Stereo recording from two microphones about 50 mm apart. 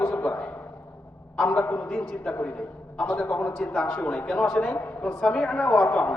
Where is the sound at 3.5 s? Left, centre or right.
Centre; by 6.1 s left.